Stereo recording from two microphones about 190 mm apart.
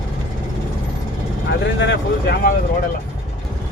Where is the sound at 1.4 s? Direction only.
65° left (ahead or behind).